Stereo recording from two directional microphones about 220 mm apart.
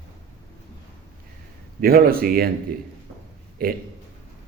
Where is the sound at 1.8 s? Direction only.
40° right (ahead or behind).